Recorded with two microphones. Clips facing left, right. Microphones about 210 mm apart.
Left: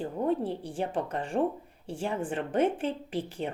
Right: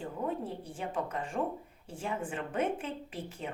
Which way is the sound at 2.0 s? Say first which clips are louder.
Left 5 dB; 30° left (ahead or behind).